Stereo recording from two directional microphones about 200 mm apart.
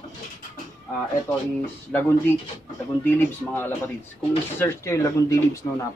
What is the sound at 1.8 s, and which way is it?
A man's voice, 10° left (ahead or behind).